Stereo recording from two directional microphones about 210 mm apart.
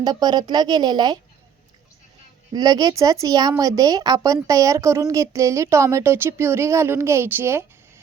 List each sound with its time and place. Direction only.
0.0 s speech: 20° right (ahead or behind)
2.5 s speech: 20° right (ahead or behind)